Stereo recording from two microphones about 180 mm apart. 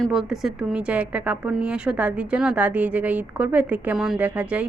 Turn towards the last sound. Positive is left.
turn(degrees=-5)  # may be behind; listen again after turning